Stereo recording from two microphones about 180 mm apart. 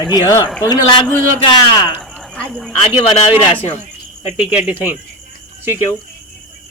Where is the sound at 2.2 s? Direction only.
5° left (ahead or behind).